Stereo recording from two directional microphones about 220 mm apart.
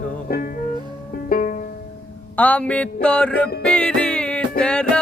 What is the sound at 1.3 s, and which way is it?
Music, 35° left (ahead or behind).